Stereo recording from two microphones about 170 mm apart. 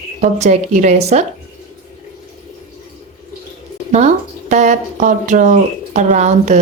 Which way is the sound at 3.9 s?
45° right (ahead or behind).